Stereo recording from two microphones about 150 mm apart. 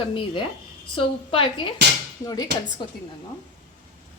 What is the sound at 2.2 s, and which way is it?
Speech, 25° left (ahead or behind).